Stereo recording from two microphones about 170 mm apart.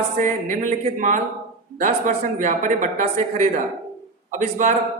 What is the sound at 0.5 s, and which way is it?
A man's voice, 50° right (ahead or behind).